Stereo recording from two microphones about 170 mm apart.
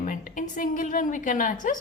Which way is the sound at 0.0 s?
50° left (ahead or behind).